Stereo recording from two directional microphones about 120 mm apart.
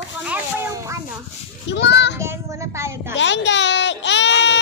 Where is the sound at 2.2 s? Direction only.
25° right (ahead or behind).